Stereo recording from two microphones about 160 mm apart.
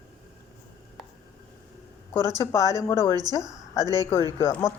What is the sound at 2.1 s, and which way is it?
A woman's voice, 20° left (ahead or behind).